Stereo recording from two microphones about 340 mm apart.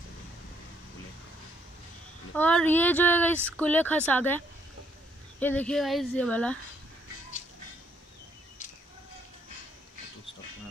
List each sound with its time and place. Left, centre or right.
2.3 s speech: centre
5.4 s speech: centre